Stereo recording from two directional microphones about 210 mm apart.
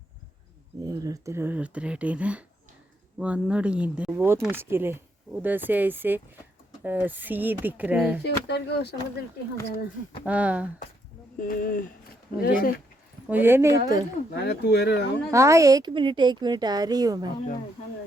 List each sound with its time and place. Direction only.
0.9 s speech: 15° right (ahead or behind)
8.2 s speech: 50° left (ahead or behind)
10.2 s speech: 5° right (ahead or behind)
11.3 s speech: 40° left (ahead or behind)
13.2 s speech: 10° right (ahead or behind)
14.3 s speech: 50° left (ahead or behind)
15.3 s speech: 15° right (ahead or behind)